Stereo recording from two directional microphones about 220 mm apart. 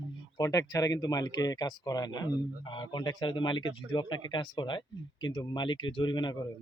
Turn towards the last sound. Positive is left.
turn(degrees=20)  # may be behind; listen again after turning